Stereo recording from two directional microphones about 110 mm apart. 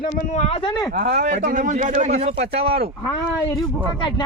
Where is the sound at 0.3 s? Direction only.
75° left (ahead or behind).